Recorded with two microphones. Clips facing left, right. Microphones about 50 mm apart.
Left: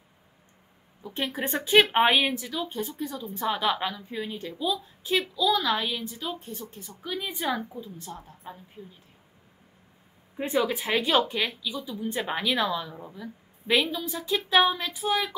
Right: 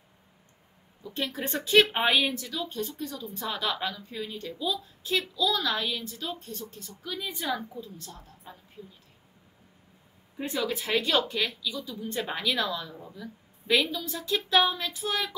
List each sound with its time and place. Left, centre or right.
1.0 s a woman's voice: left
10.3 s speech: left